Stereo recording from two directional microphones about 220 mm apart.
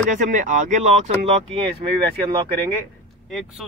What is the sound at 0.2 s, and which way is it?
Speech, 35° right (ahead or behind).